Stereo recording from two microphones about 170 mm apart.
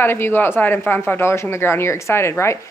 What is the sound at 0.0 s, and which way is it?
Speech, 15° left (ahead or behind).